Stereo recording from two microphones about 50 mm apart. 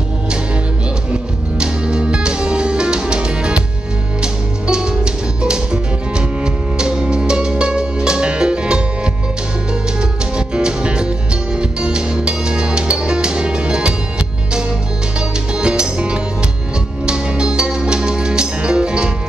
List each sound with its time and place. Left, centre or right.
1.6 s music: centre
10.3 s music: centre
15.1 s music: centre